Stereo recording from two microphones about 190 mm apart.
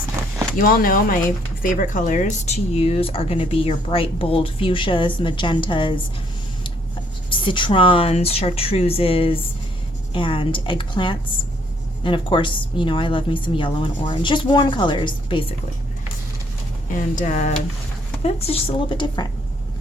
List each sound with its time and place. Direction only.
0.6 s speech: 50° left (ahead or behind); by 5.9 s 25° left (ahead or behind)
7.3 s speech: 25° left (ahead or behind)
16.9 s speech: 40° left (ahead or behind); by 19.3 s 20° left (ahead or behind)